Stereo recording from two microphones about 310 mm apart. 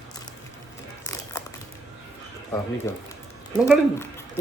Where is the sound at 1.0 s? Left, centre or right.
Centre.